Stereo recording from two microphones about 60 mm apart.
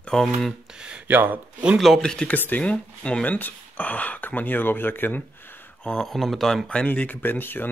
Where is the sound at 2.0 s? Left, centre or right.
Centre.